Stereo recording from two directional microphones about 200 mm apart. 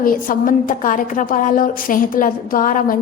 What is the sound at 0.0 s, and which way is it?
A woman's voice, 45° left (ahead or behind).